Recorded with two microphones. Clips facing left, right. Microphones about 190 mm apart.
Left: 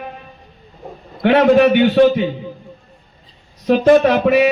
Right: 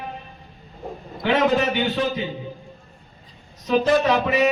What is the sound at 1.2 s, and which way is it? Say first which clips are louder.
A man's voice: left 9 dB; 60° left (ahead or behind).